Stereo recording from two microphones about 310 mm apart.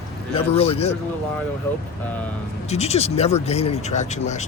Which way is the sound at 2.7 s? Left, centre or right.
Centre.